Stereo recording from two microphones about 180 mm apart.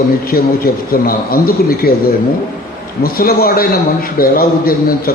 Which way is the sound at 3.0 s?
55° left (ahead or behind).